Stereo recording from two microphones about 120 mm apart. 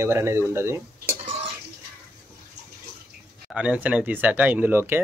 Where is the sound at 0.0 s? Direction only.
25° right (ahead or behind).